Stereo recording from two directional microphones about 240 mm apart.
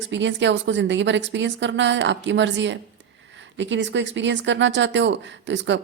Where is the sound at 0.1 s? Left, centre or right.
Right.